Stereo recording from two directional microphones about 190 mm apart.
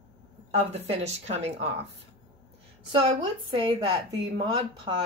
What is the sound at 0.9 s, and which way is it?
Speech, 35° right (ahead or behind).